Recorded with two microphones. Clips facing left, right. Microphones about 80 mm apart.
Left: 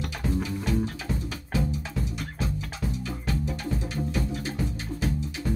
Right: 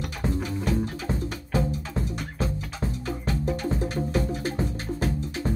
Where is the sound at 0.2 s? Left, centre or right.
Right.